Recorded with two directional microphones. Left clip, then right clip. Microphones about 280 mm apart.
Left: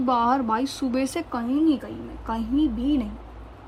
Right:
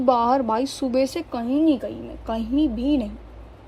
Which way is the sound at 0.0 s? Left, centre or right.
Left.